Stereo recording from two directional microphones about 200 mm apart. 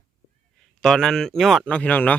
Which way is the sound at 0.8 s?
Centre (ahead or behind).